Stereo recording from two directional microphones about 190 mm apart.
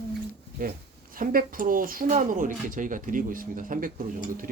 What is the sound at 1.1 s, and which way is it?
Speech, 50° right (ahead or behind).